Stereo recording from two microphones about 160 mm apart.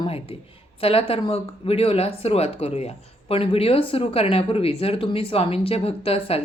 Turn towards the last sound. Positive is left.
turn(degrees=35)  # may be behind; listen again after turning